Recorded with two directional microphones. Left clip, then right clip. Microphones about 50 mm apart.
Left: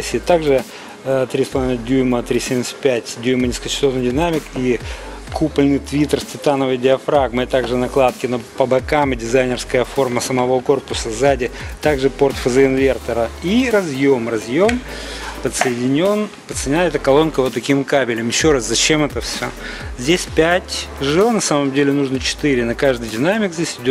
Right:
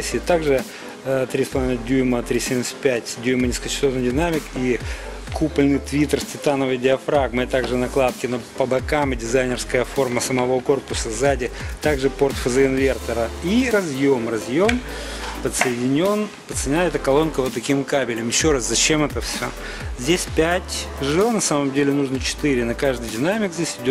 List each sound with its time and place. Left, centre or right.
0.0 s speech: left
20.1 s speech: left